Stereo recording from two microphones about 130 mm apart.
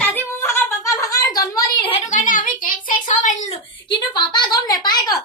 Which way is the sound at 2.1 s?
80° left.